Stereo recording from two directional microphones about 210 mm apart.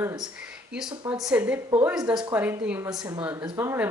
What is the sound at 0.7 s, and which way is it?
A woman's voice, centre (ahead or behind).